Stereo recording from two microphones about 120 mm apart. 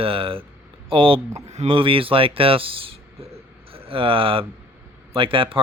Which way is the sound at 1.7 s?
45° right (ahead or behind).